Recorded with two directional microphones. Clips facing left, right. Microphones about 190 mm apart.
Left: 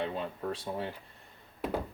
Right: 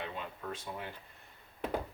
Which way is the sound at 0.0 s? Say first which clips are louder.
Left 7 dB; 35° left (ahead or behind).